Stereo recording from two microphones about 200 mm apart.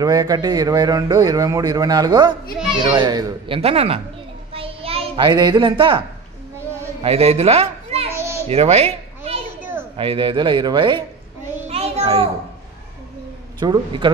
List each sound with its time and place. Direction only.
0.0 s a man's voice: 20° right (ahead or behind)
4.6 s a sound: 30° right (ahead or behind)
7.0 s a child's voice: 30° right (ahead or behind)
8.1 s children playing: 15° right (ahead or behind)
8.5 s children playing: 30° right (ahead or behind)
9.6 s a sound: 10° right (ahead or behind)
9.9 s a man's voice: 25° right (ahead or behind)
11.6 s a sound: 30° right (ahead or behind)
13.6 s a man's voice: 20° right (ahead or behind)